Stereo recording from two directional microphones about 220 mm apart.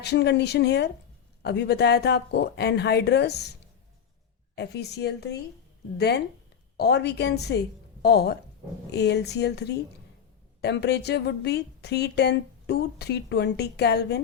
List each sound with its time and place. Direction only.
0.0 s speech: 50° left (ahead or behind)
4.5 s speech: 50° left (ahead or behind)